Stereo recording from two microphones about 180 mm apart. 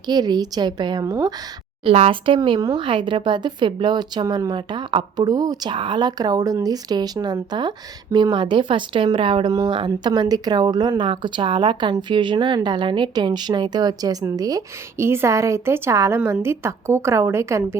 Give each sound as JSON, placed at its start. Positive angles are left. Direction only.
{"t": 0.1, "sound": "speech", "side_deg": -20}
{"t": 1.8, "sound": "speech", "side_deg": -30}